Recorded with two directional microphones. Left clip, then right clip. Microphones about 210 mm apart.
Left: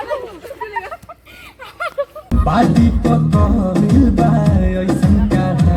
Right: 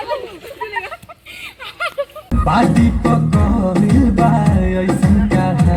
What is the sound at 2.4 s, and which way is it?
Music, 35° left (ahead or behind).